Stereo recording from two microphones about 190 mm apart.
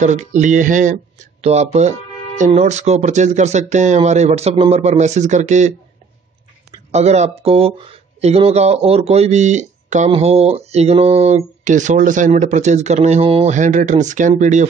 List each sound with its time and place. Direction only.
0.0 s speech: 40° right (ahead or behind)
6.9 s speech: 35° right (ahead or behind)